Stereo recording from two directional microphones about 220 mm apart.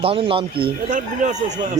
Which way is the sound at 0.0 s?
25° right (ahead or behind).